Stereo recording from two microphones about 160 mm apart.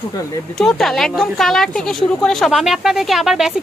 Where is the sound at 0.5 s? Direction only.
Centre (ahead or behind).